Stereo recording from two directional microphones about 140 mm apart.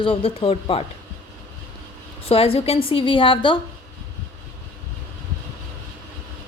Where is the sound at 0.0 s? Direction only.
40° left (ahead or behind).